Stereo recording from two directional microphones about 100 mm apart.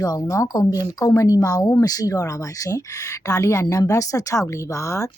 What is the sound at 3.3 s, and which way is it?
Speech, 30° left (ahead or behind).